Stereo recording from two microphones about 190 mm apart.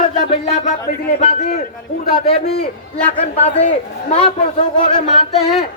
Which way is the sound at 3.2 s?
35° left (ahead or behind).